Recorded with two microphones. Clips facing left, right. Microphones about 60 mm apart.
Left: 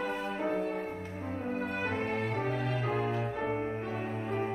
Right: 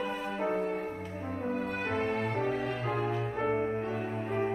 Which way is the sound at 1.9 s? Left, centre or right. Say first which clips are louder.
Right 2 dB; right.